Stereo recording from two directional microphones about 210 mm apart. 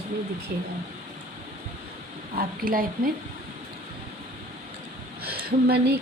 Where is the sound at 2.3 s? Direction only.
45° right (ahead or behind).